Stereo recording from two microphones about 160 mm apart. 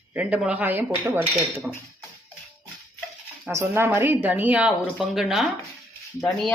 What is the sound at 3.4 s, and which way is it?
Speech, 15° right (ahead or behind).